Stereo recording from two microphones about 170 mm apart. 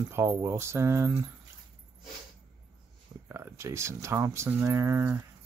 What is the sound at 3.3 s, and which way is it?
Speech, 15° right (ahead or behind).